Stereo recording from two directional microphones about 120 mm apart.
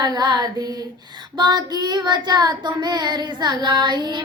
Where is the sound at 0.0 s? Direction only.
35° right (ahead or behind).